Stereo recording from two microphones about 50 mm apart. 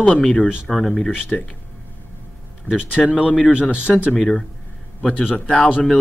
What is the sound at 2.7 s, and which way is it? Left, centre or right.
Speech, left.